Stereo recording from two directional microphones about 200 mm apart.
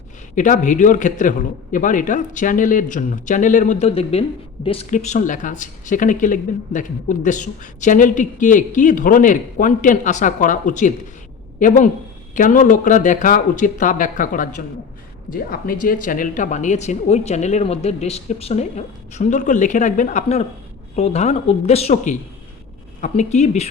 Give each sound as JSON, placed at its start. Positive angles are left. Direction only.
{"t": 0.3, "sound": "a man's voice", "side_deg": 40}
{"t": 12.3, "sound": "a man's voice", "side_deg": 40}